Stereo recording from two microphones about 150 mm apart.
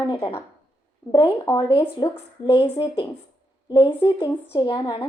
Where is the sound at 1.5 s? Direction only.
25° left (ahead or behind).